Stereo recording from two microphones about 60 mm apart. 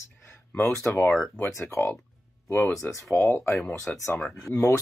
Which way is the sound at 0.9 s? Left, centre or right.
Left.